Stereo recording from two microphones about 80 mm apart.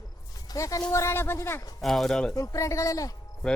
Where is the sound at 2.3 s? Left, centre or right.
Left.